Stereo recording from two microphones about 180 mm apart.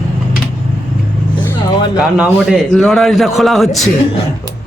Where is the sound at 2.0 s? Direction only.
5° right (ahead or behind).